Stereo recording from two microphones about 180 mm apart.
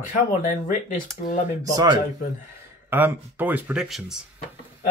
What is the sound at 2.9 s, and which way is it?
Speech, 10° right (ahead or behind).